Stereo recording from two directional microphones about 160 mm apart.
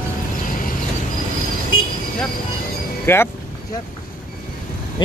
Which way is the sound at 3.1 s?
15° left (ahead or behind).